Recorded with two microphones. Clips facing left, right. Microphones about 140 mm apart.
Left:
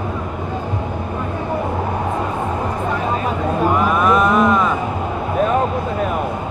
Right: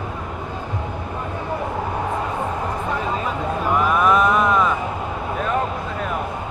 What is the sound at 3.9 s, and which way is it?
Mantra, centre (ahead or behind).